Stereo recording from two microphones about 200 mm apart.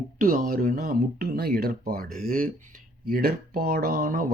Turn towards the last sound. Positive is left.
turn(degrees=-45)  # may be behind; listen again after turning